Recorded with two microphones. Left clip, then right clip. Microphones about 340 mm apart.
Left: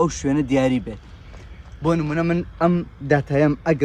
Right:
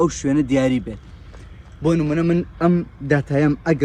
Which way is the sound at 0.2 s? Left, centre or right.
Left.